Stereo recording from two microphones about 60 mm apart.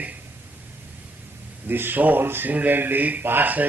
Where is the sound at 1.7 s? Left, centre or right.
Right.